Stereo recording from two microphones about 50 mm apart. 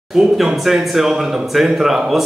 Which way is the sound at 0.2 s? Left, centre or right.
Centre.